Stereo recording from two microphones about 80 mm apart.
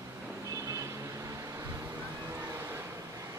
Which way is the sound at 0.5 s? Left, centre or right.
Right.